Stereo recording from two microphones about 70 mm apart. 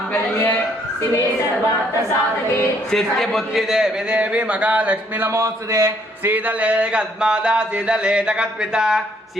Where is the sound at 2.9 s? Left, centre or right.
Centre.